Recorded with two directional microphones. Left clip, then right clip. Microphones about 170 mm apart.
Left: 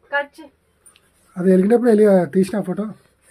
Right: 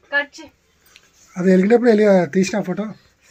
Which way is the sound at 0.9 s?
Centre (ahead or behind).